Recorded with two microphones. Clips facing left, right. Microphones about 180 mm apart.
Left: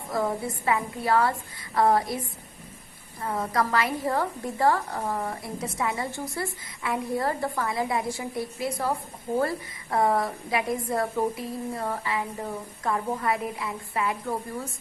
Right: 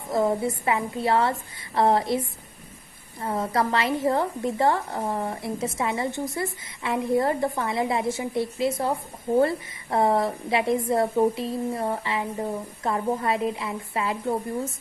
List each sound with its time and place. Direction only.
0.1 s a woman's voice: 25° right (ahead or behind)